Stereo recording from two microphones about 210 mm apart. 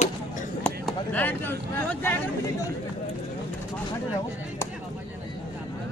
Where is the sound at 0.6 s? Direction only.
5° left (ahead or behind).